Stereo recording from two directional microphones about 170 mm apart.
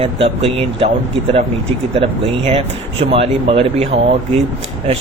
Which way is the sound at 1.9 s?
35° right (ahead or behind).